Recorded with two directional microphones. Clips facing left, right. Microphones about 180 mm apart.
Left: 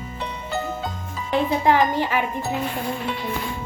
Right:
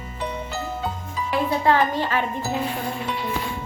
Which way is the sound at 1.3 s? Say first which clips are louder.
Left 1 dB; 15° left (ahead or behind).